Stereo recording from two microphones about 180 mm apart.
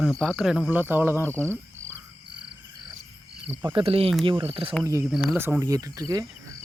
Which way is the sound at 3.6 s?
25° right (ahead or behind).